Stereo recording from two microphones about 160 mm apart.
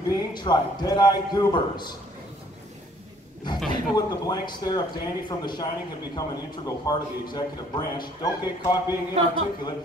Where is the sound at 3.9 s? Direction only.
25° left (ahead or behind).